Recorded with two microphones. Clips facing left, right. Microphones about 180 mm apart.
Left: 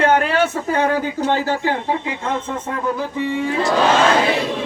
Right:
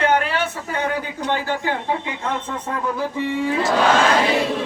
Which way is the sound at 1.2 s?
40° left (ahead or behind).